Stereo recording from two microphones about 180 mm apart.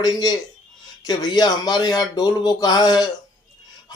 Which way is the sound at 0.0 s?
20° left (ahead or behind).